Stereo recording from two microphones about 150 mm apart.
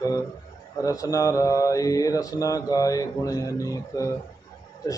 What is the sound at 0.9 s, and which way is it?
Mantra, 20° left (ahead or behind).